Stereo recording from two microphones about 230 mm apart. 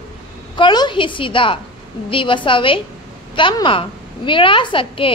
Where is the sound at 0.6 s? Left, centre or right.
Centre.